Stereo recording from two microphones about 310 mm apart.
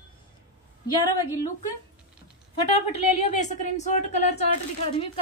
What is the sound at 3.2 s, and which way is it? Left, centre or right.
A woman's voice, left.